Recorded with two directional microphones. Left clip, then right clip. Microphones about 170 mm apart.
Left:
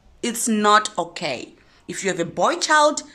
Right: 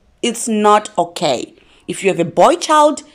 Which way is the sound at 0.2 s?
5° right (ahead or behind).